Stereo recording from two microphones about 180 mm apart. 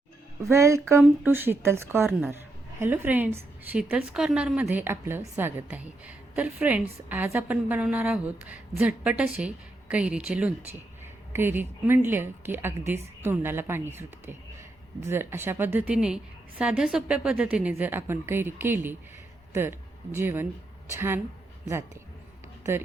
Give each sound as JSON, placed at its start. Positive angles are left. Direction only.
{"t": 0.5, "sound": "a woman's voice", "side_deg": -15}